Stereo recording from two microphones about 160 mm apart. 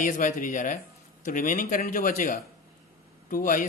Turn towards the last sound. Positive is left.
turn(degrees=60)  # may be behind; listen again after turning